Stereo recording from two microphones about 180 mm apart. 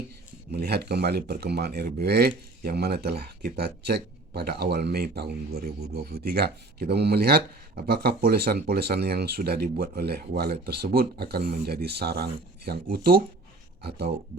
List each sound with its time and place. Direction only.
0.5 s speech: 65° right (ahead or behind)